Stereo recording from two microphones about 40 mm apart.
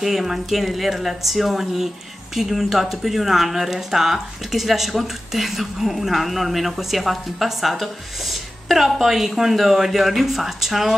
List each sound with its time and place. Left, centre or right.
0.0 s speech: centre